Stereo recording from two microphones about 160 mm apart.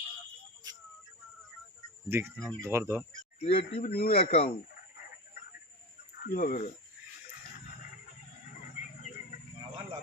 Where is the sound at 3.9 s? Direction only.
70° left (ahead or behind).